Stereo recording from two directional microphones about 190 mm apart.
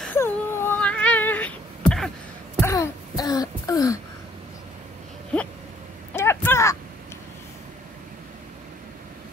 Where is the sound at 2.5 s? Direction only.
15° left (ahead or behind).